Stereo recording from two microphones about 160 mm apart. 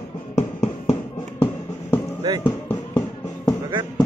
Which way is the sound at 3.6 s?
20° right (ahead or behind).